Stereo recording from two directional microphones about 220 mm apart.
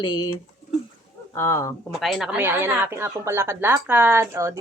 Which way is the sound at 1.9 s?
Centre (ahead or behind).